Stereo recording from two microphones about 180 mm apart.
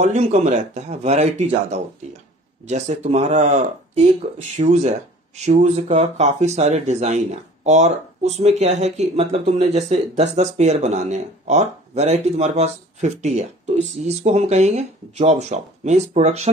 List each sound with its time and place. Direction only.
0.0 s speech: 40° right (ahead or behind)